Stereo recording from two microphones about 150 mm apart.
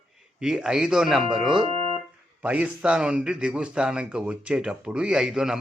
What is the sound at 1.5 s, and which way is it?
Music, 40° right (ahead or behind).